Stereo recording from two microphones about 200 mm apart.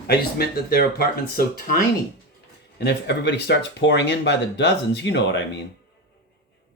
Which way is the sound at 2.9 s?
60° left (ahead or behind).